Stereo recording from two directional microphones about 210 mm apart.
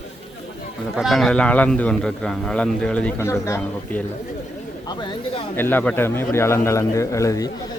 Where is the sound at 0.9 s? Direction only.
Centre (ahead or behind); by 5.1 s 20° left (ahead or behind).